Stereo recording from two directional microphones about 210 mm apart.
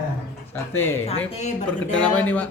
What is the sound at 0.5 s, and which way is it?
Speech, 10° left (ahead or behind).